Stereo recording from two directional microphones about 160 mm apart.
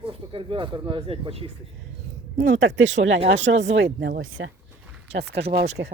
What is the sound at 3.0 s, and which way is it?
Speech, 50° right (ahead or behind).